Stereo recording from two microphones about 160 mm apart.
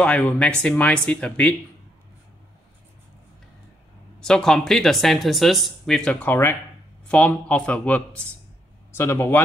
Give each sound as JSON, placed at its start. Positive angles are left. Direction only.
{"t": 0.0, "sound": "speech", "side_deg": 10}
{"t": 4.2, "sound": "speech", "side_deg": 5}